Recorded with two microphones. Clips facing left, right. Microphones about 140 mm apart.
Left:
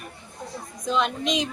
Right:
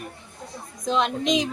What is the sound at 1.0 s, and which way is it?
Speech, centre (ahead or behind).